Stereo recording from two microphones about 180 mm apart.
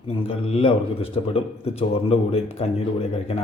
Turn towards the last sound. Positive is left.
turn(degrees=35)  # may be behind; listen again after turning